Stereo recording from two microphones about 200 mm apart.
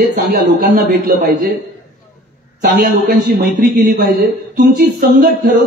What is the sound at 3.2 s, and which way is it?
Speech, 45° right (ahead or behind).